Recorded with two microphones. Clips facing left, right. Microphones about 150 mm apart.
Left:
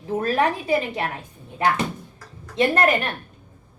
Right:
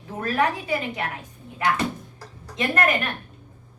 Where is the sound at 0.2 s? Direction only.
30° left (ahead or behind).